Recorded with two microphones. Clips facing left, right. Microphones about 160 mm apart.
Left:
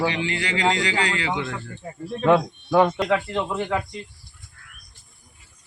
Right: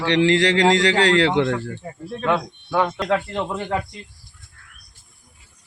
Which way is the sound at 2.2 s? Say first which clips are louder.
Left 4 dB; 10° left (ahead or behind).